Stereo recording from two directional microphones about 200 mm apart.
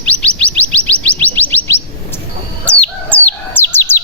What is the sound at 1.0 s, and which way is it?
Music, 10° left (ahead or behind).